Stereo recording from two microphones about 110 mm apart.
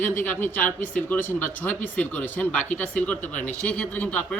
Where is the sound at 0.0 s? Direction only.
20° left (ahead or behind).